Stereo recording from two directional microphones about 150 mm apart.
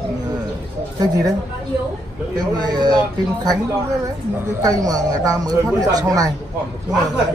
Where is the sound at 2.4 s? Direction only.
25° right (ahead or behind).